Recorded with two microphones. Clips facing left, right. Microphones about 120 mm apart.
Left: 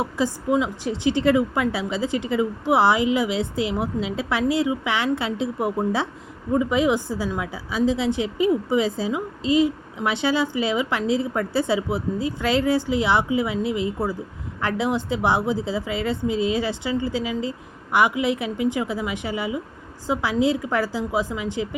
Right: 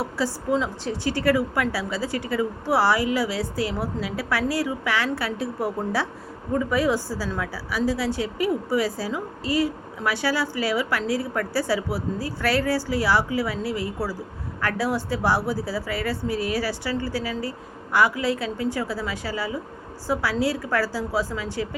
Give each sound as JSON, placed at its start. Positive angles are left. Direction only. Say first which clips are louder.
{"t": 0.0, "sound": "speech", "louder": "left 2 dB", "side_deg": 15}